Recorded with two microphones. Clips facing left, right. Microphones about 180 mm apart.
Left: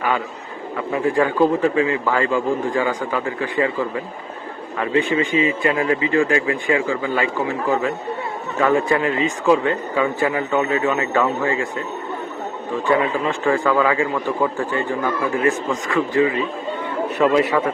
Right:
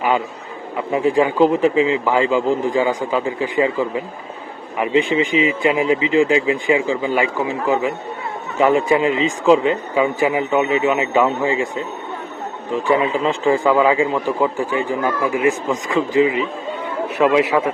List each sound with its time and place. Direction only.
0.9 s a man's voice: 20° right (ahead or behind)
12.9 s a man's voice: 20° right (ahead or behind)
17.2 s a man's voice: 5° right (ahead or behind)